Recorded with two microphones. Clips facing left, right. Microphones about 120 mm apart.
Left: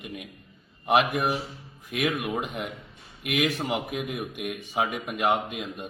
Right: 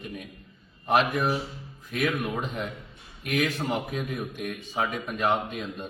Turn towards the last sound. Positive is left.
turn(degrees=15)  # may be behind; listen again after turning